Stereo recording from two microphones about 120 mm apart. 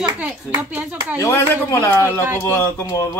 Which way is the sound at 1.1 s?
25° left (ahead or behind).